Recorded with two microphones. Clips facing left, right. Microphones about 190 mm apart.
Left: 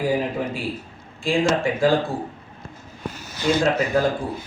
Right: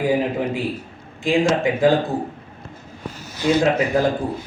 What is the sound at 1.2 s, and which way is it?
Speech, 20° right (ahead or behind).